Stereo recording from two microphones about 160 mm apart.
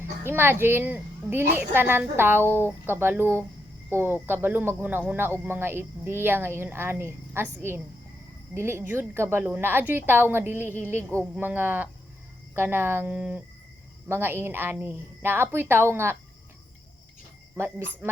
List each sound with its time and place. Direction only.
0.3 s speech: 15° right (ahead or behind)
17.6 s speech: 15° right (ahead or behind)